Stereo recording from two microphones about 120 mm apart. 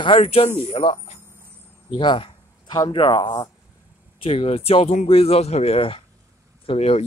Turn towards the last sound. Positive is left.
turn(degrees=60)  # may be behind; listen again after turning